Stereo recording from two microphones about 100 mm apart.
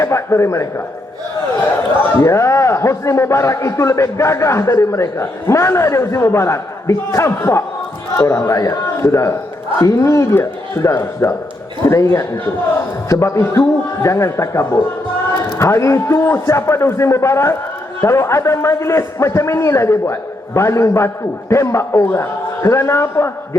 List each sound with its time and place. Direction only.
0.0 s a man's voice: 30° left (ahead or behind)
2.1 s a man's voice: 25° left (ahead or behind)
13.1 s a man's voice: 30° left (ahead or behind)